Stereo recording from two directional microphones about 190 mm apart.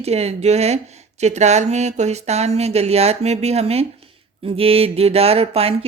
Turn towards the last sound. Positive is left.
turn(degrees=-30)  # may be behind; listen again after turning